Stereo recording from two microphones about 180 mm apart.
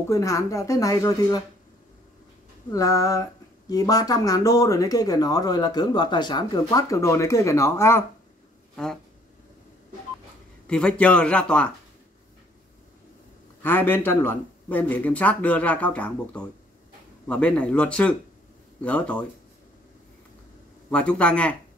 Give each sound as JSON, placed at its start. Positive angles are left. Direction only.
{"t": 0.1, "sound": "speech", "side_deg": 15}
{"t": 2.7, "sound": "speech", "side_deg": 20}
{"t": 10.7, "sound": "speech", "side_deg": 5}
{"t": 13.6, "sound": "speech", "side_deg": 10}
{"t": 20.9, "sound": "speech", "side_deg": 5}